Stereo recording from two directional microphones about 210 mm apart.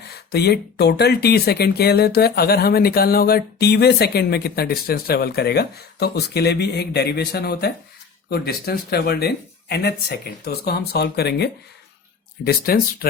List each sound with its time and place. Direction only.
0.1 s speech: 50° left (ahead or behind)